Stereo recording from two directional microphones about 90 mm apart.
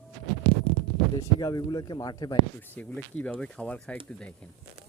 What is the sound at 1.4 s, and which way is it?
Speech, 50° left (ahead or behind).